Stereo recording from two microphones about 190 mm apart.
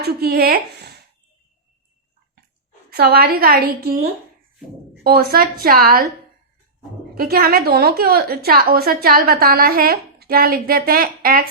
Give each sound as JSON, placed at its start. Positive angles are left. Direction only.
{"t": 0.0, "sound": "a woman's voice", "side_deg": -55}
{"t": 2.9, "sound": "a woman's voice", "side_deg": -55}
{"t": 5.0, "sound": "a woman's voice", "side_deg": -50}
{"t": 7.2, "sound": "a woman's voice", "side_deg": -50}